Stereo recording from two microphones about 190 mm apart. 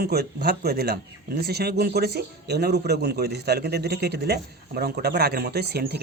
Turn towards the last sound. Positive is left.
turn(degrees=-55)  # may be behind; listen again after turning